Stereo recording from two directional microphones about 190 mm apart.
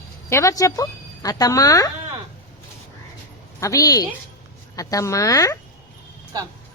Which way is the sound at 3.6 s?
20° left (ahead or behind).